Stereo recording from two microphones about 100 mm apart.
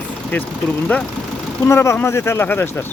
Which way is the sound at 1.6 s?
30° left (ahead or behind).